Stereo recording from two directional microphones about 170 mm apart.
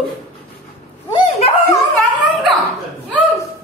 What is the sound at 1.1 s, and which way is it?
Dog, 30° left (ahead or behind).